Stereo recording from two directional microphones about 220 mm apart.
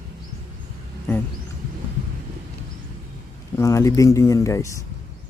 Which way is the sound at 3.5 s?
15° left (ahead or behind).